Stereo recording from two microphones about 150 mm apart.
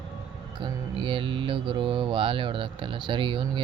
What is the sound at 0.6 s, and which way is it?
Speech, 35° right (ahead or behind).